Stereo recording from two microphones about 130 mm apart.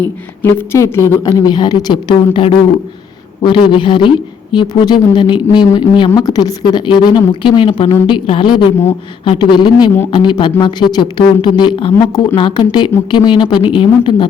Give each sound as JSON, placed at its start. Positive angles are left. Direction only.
{"t": 0.4, "sound": "a woman's voice", "side_deg": 20}